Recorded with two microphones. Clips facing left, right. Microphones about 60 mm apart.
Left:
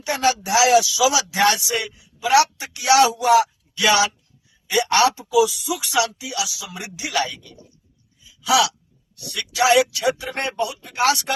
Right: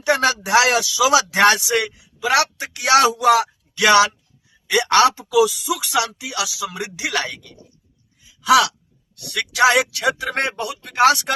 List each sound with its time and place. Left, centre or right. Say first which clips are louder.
0.0 s speech: right 2 dB; right
2.6 s speech: right 1 dB; right
9.2 s speech: right 3 dB; right